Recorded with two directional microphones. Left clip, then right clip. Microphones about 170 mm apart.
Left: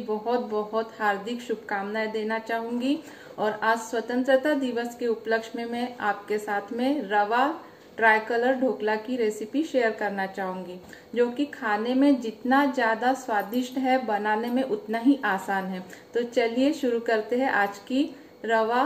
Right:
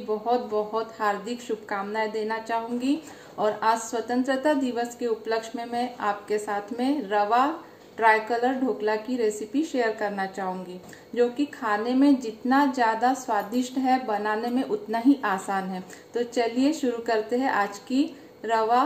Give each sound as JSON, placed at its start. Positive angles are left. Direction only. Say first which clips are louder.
{"t": 0.3, "sound": "a woman's voice", "louder": "right 2 dB", "side_deg": 0}